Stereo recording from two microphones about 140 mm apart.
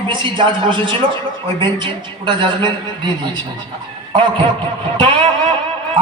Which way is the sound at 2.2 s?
35° right (ahead or behind).